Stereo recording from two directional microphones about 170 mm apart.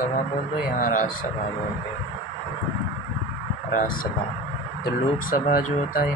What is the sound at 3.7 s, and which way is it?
Speech, 50° left (ahead or behind).